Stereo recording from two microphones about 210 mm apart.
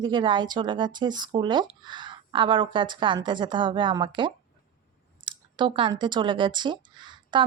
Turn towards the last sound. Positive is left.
turn(degrees=-20)  # may be behind; listen again after turning